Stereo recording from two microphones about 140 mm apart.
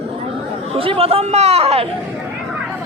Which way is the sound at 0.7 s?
40° right (ahead or behind).